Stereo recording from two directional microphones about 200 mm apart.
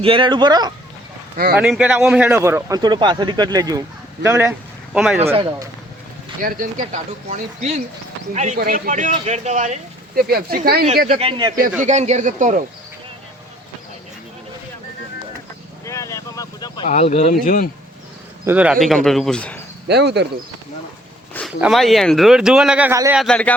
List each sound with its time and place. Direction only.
0.0 s speech: 25° right (ahead or behind)
1.5 s speech: 5° right (ahead or behind)
5.2 s speech: 30° right (ahead or behind)
6.4 s speech: 40° right (ahead or behind)
10.2 s speech: 50° right (ahead or behind)
11.1 s speech: 30° right (ahead or behind)
11.8 s speech: 35° right (ahead or behind)
15.9 s vehicle: 15° left (ahead or behind)
16.8 s speech: 35° left (ahead or behind)
18.4 s speech: 5° right (ahead or behind)
19.9 s speech: 55° right (ahead or behind)
21.6 s speech: centre (ahead or behind)
23.1 s speech: 5° left (ahead or behind)